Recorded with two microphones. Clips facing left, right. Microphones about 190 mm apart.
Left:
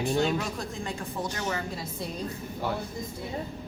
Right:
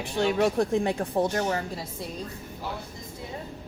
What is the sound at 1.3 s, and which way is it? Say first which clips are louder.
Speech: right 5 dB; 45° right (ahead or behind).